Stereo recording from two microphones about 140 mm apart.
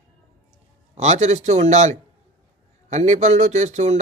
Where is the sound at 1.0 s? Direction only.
55° right (ahead or behind).